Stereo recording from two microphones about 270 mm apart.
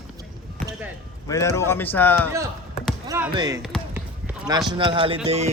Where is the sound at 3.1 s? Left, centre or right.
Centre.